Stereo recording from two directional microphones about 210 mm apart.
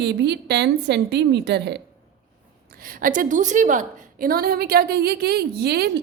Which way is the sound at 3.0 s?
40° right (ahead or behind).